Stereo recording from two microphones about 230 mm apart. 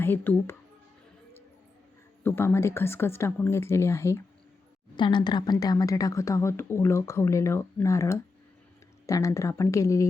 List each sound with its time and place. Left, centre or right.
0.0 s a woman's voice: centre
2.2 s a woman's voice: centre